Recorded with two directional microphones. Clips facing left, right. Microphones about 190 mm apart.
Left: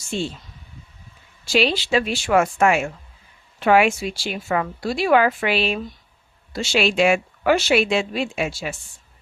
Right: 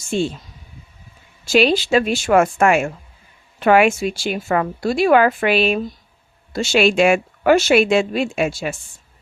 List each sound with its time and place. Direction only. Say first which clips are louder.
0.1 s speech: right 6 dB; 50° right (ahead or behind)
1.5 s speech: right 5 dB; 50° right (ahead or behind)